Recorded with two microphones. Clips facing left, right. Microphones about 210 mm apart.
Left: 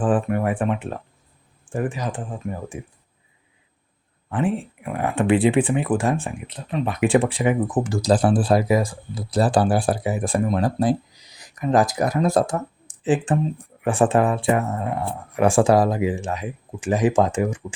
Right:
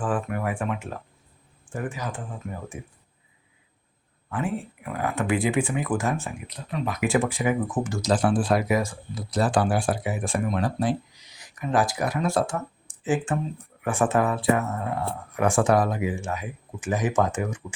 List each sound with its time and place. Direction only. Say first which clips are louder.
0.0 s speech: left 6 dB; 30° left (ahead or behind)
1.7 s a sound: left 7 dB; 30° left (ahead or behind)
2.7 s speech: left 4 dB; 15° left (ahead or behind)
4.3 s speech: left 5 dB; 30° left (ahead or behind)